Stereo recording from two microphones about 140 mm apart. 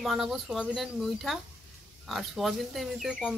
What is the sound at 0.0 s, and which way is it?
Speech, centre (ahead or behind).